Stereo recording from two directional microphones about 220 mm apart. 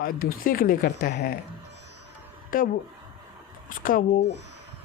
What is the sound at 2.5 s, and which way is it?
Speech, 40° left (ahead or behind).